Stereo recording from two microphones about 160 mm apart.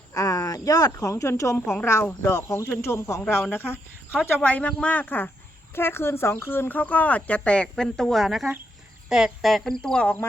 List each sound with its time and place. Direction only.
0.1 s speech: 20° left (ahead or behind)